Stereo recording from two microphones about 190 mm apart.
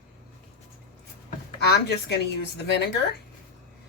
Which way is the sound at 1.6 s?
60° left (ahead or behind).